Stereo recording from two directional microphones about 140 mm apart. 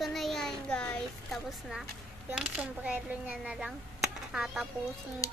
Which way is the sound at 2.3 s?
10° right (ahead or behind).